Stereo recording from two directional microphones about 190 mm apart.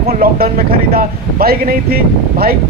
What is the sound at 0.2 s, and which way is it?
A man's voice, 55° right (ahead or behind).